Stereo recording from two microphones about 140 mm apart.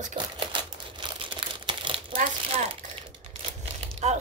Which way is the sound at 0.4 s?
35° right (ahead or behind).